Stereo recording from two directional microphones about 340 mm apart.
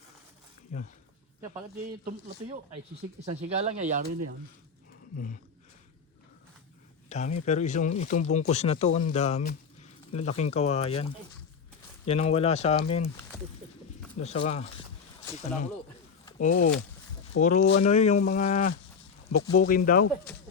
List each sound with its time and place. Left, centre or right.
0.7 s speech: left
1.8 s speech: right
5.1 s speech: left
7.1 s speech: left
16.4 s speech: left
19.3 s speech: left
19.6 s speech: left